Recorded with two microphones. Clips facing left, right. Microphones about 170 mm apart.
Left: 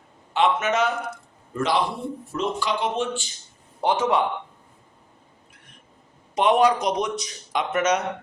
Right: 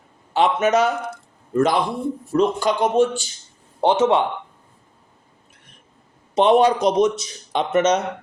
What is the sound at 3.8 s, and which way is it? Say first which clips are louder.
Speech: right 5 dB; 25° right (ahead or behind).